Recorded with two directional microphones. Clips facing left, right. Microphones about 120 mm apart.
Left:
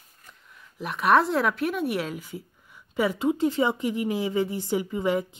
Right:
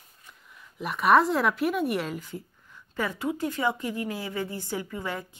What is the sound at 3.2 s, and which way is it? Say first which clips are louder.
A woman's voice: left 3 dB; 25° left (ahead or behind).